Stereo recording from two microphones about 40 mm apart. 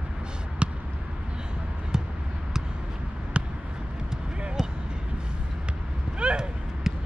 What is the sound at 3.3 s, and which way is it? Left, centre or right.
Basketball bounce, right.